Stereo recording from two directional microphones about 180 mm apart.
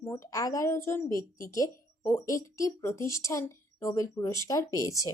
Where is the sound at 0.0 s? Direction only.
20° left (ahead or behind).